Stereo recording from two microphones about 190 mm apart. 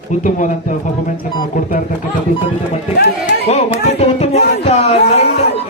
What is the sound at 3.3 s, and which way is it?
Speech, 35° left (ahead or behind).